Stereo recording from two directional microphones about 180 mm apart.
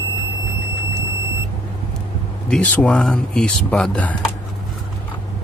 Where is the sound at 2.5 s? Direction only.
10° left (ahead or behind).